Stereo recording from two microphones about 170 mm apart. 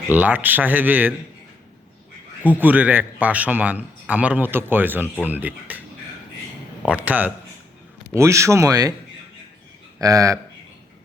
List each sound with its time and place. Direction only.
0.1 s a man's voice: 10° right (ahead or behind)
2.6 s a man's voice: 10° right (ahead or behind)
6.8 s a man's voice: 10° right (ahead or behind)
10.0 s speech: 20° right (ahead or behind)